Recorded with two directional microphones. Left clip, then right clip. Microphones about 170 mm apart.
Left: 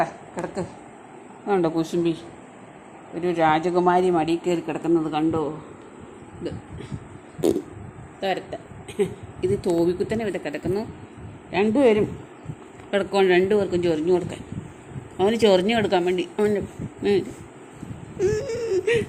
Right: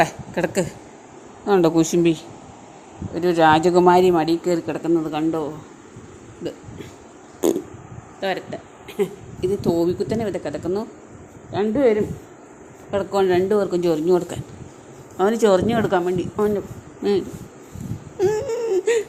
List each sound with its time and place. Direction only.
0.0 s speech: 60° right (ahead or behind)
1.5 s a woman's voice: 25° right (ahead or behind); by 5.5 s 5° right (ahead or behind)
8.2 s speech: 5° right (ahead or behind)
11.7 s speech: 30° left (ahead or behind)
12.9 s speech: 10° left (ahead or behind)
13.7 s speech: 20° right (ahead or behind)
15.2 s speech: 5° right (ahead or behind)
18.2 s a sound: 30° right (ahead or behind)